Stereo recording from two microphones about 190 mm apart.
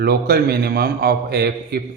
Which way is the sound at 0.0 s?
55° right (ahead or behind).